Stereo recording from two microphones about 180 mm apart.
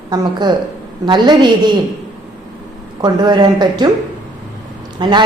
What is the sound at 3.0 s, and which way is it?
Speech, 25° right (ahead or behind).